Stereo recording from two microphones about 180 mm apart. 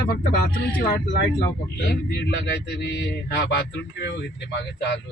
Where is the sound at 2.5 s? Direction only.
70° left (ahead or behind).